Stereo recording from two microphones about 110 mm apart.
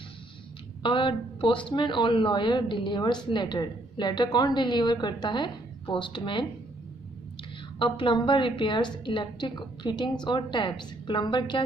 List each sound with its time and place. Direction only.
0.8 s a woman's voice: 50° left (ahead or behind)
7.8 s speech: 50° left (ahead or behind)